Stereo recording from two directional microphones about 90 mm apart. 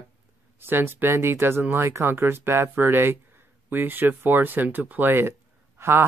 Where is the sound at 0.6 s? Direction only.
25° right (ahead or behind).